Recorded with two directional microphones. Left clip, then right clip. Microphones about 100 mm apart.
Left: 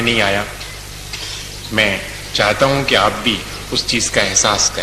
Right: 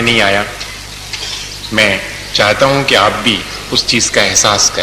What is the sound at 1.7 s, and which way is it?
A man's voice, 35° left (ahead or behind).